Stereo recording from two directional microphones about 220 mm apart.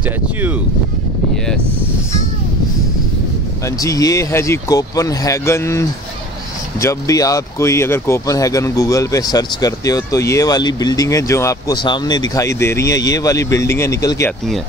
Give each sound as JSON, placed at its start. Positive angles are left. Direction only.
{"t": 3.6, "sound": "speech", "side_deg": 15}